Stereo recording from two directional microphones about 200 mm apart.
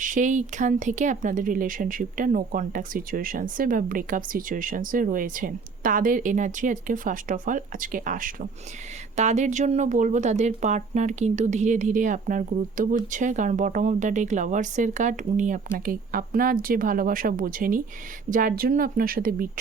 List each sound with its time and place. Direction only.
0.0 s speech: 40° right (ahead or behind)